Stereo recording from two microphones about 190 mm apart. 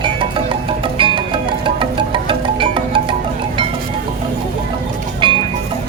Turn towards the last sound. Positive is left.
turn(degrees=-25)  # may be behind; listen again after turning